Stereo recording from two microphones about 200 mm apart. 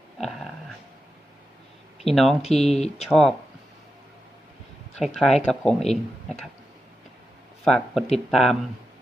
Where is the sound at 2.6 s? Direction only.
30° left (ahead or behind).